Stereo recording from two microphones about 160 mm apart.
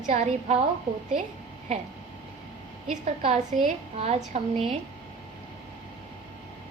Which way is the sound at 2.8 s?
40° right (ahead or behind).